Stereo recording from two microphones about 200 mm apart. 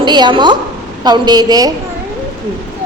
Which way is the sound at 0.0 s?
20° right (ahead or behind).